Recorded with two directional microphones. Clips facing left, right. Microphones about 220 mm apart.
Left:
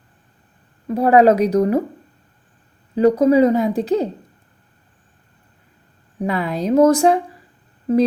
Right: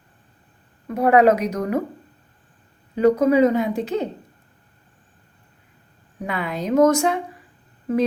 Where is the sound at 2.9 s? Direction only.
35° left (ahead or behind).